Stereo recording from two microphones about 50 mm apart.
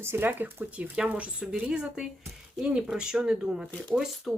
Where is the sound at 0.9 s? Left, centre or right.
Right.